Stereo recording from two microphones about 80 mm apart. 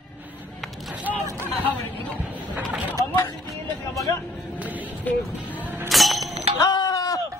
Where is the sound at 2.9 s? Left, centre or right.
Left.